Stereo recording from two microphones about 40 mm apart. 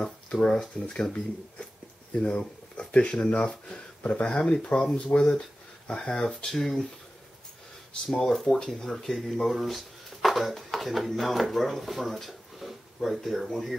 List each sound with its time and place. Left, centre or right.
0.0 s speech: centre
2.1 s speech: left
6.5 s speech: centre
8.1 s speech: centre